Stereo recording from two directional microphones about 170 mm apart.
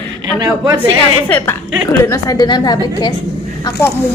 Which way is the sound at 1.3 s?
15° left (ahead or behind).